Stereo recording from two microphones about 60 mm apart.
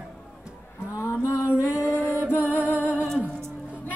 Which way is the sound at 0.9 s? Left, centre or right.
Left.